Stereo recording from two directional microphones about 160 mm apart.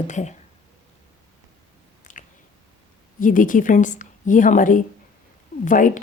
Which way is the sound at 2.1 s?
55° left (ahead or behind).